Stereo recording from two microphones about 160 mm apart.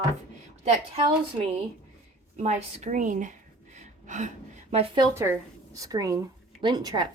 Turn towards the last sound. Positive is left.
turn(degrees=-25)  # may be behind; listen again after turning